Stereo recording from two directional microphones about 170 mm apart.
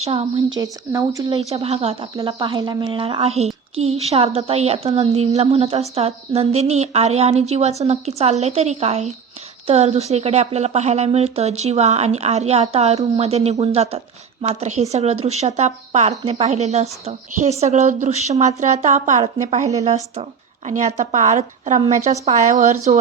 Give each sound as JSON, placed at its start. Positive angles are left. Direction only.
{"t": 0.0, "sound": "speech", "side_deg": -35}
{"t": 0.6, "sound": "speech", "side_deg": -20}
{"t": 1.3, "sound": "speech", "side_deg": -40}